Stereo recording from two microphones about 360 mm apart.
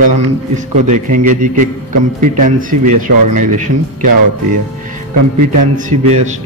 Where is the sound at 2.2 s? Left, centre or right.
Right.